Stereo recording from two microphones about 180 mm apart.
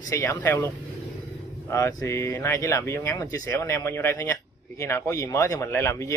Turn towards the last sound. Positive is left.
turn(degrees=15)  # may be behind; listen again after turning